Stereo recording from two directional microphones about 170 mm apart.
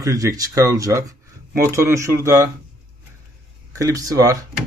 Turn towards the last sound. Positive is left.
turn(degrees=-20)  # may be behind; listen again after turning